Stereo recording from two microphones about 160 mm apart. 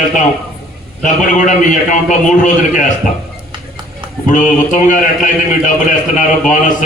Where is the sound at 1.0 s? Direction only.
50° left (ahead or behind).